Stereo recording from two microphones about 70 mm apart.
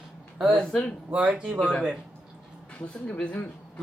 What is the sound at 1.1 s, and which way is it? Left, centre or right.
Speech, centre.